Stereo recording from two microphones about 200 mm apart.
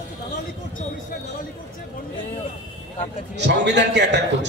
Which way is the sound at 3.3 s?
60° right (ahead or behind).